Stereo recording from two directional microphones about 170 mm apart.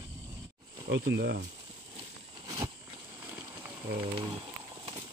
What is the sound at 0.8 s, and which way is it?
Speech, 85° right.